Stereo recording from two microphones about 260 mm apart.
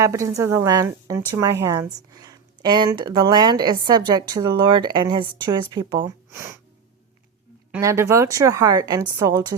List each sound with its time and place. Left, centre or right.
0.0 s a woman's voice: centre
7.7 s a woman's voice: centre